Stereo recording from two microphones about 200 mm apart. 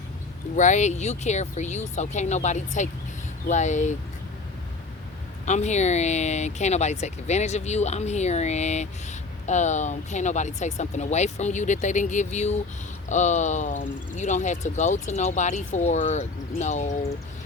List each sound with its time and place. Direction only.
0.5 s speech: 40° left (ahead or behind)
5.5 s speech: 35° left (ahead or behind)